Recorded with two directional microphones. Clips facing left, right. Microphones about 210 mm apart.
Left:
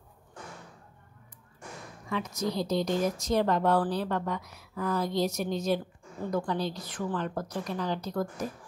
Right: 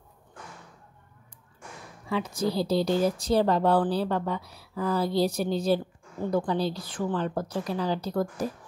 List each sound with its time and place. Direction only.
2.0 s a woman's voice: 30° right (ahead or behind)